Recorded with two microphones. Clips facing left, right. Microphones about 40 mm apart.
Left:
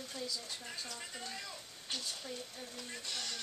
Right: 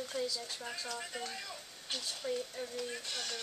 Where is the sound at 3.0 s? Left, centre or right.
Centre.